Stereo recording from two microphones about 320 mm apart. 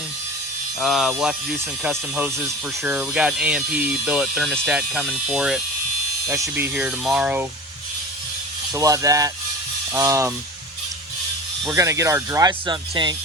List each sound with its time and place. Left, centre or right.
0.8 s speech: centre
8.7 s speech: centre
11.6 s speech: centre